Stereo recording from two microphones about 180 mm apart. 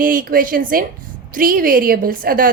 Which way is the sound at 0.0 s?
50° right (ahead or behind).